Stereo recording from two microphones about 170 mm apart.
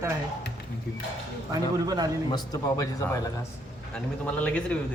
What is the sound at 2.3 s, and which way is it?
Speech, 25° left (ahead or behind).